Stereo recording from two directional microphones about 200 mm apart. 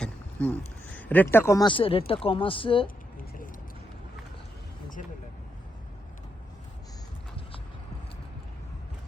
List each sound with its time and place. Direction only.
0.0 s speech: 5° left (ahead or behind); by 2.9 s 25° left (ahead or behind)